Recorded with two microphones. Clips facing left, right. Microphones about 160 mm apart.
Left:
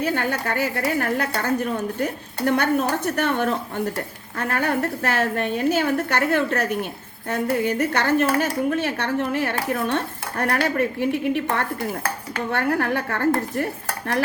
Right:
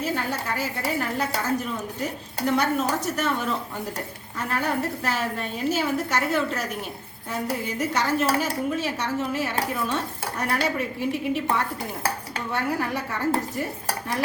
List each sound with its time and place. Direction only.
0.0 s a woman's voice: 65° left (ahead or behind)